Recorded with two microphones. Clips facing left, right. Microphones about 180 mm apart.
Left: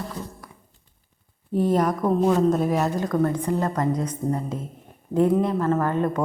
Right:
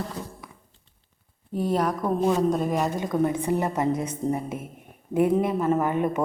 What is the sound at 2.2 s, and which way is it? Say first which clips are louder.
Speech: left 2 dB; centre (ahead or behind).